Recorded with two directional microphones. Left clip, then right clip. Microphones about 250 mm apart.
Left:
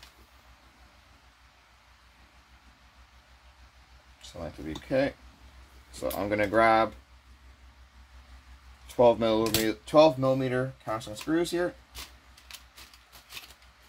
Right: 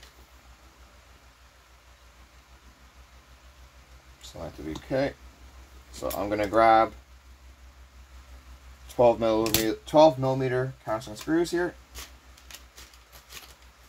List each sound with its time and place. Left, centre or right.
4.8 s speech: centre
8.9 s speech: centre